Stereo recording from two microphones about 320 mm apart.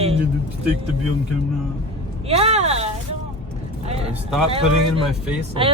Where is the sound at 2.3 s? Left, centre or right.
Centre.